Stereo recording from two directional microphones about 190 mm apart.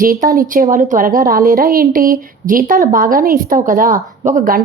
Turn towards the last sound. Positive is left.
turn(degrees=-45)  # may be behind; listen again after turning